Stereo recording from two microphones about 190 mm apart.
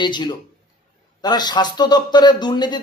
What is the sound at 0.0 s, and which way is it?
Speech, 25° left (ahead or behind).